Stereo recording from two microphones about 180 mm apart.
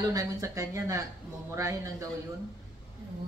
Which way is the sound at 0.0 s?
20° right (ahead or behind).